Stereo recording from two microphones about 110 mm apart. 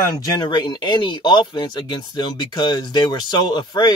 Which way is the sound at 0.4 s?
40° left (ahead or behind).